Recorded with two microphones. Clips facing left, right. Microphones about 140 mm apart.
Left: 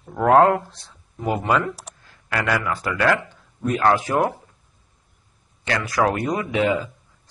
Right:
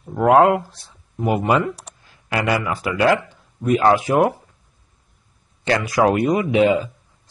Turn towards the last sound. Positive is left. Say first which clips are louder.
# right 5 dB
turn(degrees=-20)  # may be behind; listen again after turning